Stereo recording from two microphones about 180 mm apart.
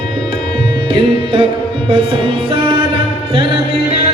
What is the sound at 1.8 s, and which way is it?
Music, 30° right (ahead or behind).